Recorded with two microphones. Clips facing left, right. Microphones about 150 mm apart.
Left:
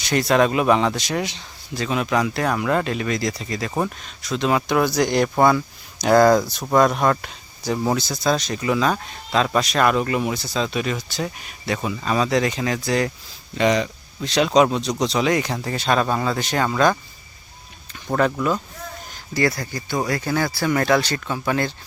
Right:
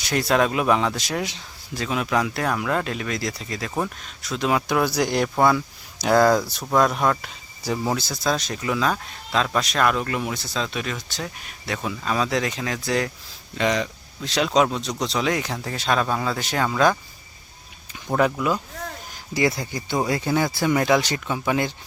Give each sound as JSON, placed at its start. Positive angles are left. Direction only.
{"t": 0.0, "sound": "speech", "side_deg": -5}
{"t": 18.1, "sound": "speech", "side_deg": -5}
{"t": 19.1, "sound": "speech", "side_deg": -15}